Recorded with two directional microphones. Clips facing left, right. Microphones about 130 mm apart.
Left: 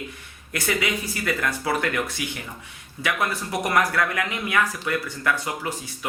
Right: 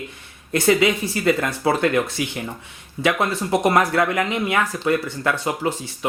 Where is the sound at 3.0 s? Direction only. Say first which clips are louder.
Right 5 dB; 25° right (ahead or behind).